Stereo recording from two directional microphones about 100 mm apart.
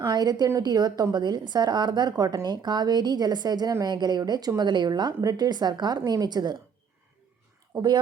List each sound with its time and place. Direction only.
0.0 s speech: 45° right (ahead or behind)